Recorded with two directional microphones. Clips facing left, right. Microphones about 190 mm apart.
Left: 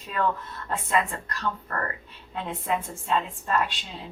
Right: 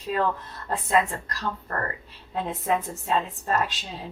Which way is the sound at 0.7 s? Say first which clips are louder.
Right 3 dB; 35° right (ahead or behind).